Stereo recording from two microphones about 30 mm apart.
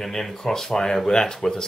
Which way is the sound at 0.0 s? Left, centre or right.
Centre.